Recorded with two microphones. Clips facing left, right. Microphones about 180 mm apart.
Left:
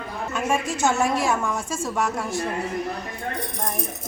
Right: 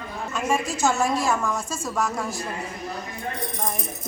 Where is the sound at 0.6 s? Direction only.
25° left (ahead or behind).